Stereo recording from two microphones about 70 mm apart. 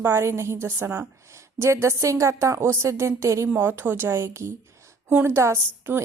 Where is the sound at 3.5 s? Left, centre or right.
Right.